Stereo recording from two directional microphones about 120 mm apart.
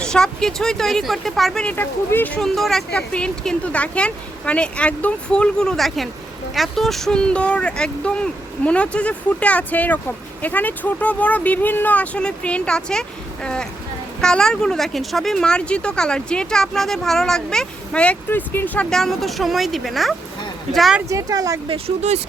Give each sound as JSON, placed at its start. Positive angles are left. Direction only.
{"t": 0.0, "sound": "speech", "side_deg": 5}
{"t": 1.7, "sound": "speech", "side_deg": 15}
{"t": 2.4, "sound": "speech", "side_deg": 0}
{"t": 21.1, "sound": "speech", "side_deg": -30}
{"t": 21.7, "sound": "speech", "side_deg": -60}